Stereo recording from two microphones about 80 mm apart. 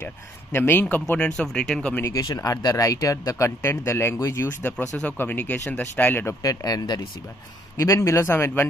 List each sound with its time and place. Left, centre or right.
0.0 s speech: left; by 2.0 s centre
2.1 s speech: left
4.9 s speech: left
6.2 s speech: left
7.7 s speech: left